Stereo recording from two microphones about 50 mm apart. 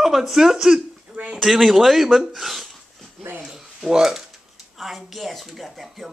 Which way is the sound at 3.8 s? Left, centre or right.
Centre.